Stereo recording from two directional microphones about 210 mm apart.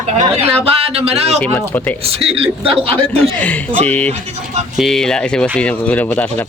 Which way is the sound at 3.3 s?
5° left (ahead or behind).